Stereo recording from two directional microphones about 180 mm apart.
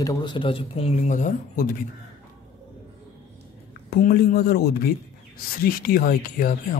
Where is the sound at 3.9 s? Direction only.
60° left (ahead or behind).